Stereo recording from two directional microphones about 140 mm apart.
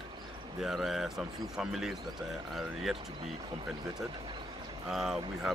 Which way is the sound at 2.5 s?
5° right (ahead or behind).